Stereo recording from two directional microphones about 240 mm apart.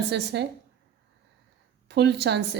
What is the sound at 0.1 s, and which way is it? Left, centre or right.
Speech, right.